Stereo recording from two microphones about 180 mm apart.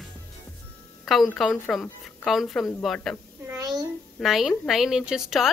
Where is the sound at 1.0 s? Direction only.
Centre (ahead or behind).